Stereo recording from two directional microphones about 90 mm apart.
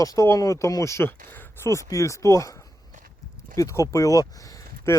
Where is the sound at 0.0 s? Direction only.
40° left (ahead or behind); by 1.7 s 25° left (ahead or behind).